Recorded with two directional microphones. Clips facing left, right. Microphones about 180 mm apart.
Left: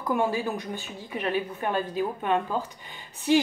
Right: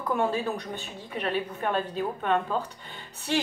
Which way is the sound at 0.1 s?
15° left (ahead or behind).